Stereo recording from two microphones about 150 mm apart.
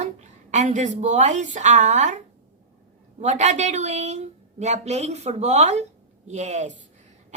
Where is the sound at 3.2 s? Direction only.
50° right (ahead or behind).